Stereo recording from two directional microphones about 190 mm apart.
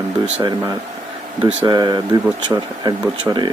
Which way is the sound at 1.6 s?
20° right (ahead or behind).